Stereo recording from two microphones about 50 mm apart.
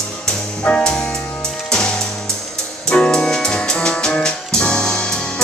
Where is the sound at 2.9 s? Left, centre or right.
Centre.